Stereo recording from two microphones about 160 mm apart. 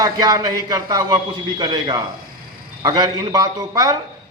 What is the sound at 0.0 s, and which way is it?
A man's voice, 20° right (ahead or behind).